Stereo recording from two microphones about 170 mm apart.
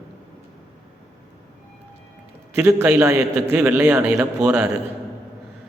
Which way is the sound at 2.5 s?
15° right (ahead or behind).